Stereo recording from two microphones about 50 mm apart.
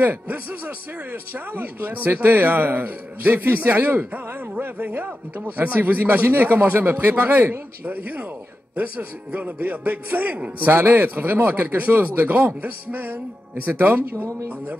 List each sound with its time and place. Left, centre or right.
0.0 s a man's voice: right